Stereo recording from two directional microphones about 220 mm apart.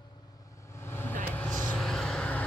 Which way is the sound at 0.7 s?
10° left (ahead or behind).